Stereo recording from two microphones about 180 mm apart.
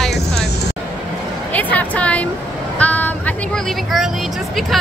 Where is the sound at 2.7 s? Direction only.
10° left (ahead or behind).